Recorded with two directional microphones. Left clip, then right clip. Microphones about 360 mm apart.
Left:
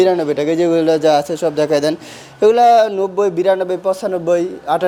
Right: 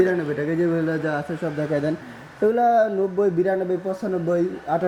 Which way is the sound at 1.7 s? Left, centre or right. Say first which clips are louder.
Left 5 dB; left.